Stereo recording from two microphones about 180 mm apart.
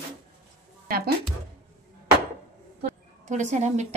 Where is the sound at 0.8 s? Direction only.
55° right (ahead or behind).